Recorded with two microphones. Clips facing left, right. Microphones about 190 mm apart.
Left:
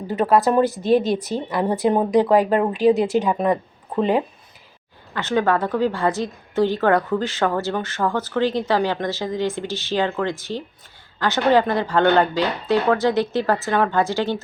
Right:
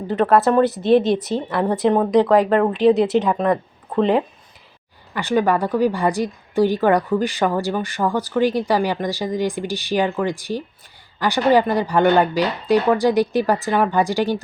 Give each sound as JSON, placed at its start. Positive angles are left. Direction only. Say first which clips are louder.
{"t": 0.1, "sound": "speech", "louder": "right 2 dB", "side_deg": 5}
{"t": 1.5, "sound": "speech", "louder": "even", "side_deg": 15}
{"t": 1.7, "sound": "speech", "louder": "right 2 dB", "side_deg": 0}
{"t": 5.1, "sound": "a woman's voice", "louder": "right 2 dB", "side_deg": -10}